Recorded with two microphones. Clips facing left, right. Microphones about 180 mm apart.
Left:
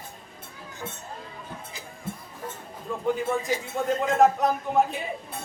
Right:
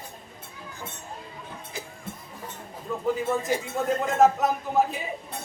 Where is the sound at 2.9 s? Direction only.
Centre (ahead or behind).